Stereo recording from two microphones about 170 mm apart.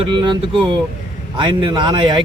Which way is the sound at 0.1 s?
30° right (ahead or behind).